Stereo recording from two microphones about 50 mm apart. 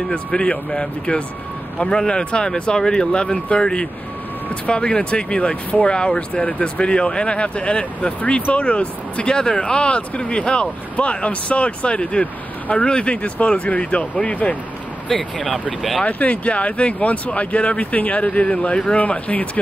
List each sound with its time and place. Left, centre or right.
0.1 s speech: centre
15.0 s speech: centre
16.1 s speech: left
18.9 s speech: left